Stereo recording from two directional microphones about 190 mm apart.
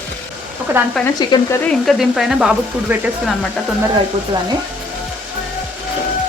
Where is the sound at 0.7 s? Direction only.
15° right (ahead or behind).